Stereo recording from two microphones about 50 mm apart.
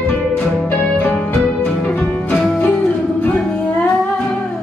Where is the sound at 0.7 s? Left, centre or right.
Left.